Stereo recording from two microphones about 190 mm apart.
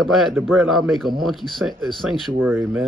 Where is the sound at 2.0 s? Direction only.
Centre (ahead or behind).